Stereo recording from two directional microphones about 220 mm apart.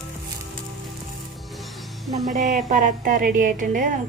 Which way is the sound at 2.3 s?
35° right (ahead or behind).